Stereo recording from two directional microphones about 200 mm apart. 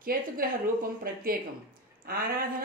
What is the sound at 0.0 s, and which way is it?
Speech, 45° right (ahead or behind).